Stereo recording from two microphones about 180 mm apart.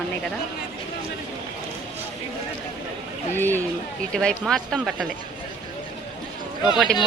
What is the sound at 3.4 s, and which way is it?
A woman's voice, 10° left (ahead or behind).